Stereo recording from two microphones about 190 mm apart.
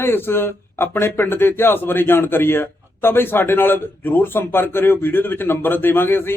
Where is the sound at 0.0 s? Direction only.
10° left (ahead or behind).